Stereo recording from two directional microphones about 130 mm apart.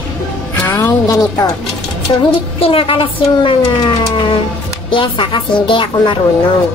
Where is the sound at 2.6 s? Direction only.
45° left (ahead or behind).